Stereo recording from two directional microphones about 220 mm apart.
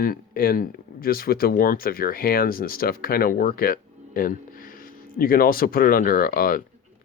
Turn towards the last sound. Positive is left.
turn(degrees=40)  # may be behind; listen again after turning